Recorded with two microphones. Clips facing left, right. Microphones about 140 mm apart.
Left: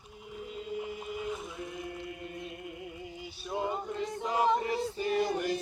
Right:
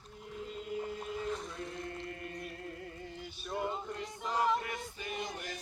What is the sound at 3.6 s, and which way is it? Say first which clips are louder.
Male singing: left 4 dB; 10° left (ahead or behind).